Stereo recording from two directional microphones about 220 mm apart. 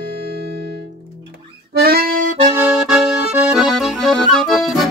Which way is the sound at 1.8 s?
45° right (ahead or behind).